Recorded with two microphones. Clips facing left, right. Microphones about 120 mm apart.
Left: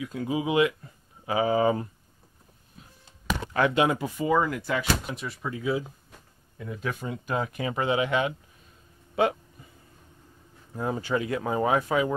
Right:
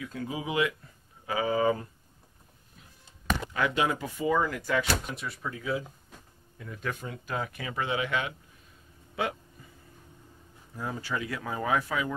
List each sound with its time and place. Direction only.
0.0 s speech: 15° left (ahead or behind)
3.6 s speech: 20° left (ahead or behind)
7.0 s speech: 20° left (ahead or behind)
10.8 s speech: 25° left (ahead or behind)